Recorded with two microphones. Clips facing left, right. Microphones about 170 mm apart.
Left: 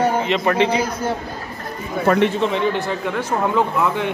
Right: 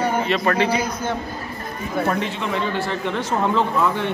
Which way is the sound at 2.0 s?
70° left (ahead or behind).